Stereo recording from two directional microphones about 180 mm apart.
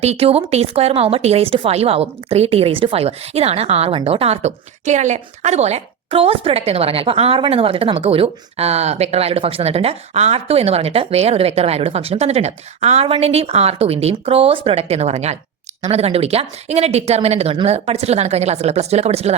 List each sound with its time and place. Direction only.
0.0 s speech: 35° right (ahead or behind)